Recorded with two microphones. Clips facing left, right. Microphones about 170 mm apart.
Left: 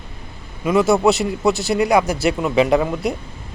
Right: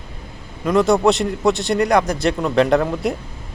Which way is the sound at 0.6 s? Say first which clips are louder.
Even; 5° left (ahead or behind).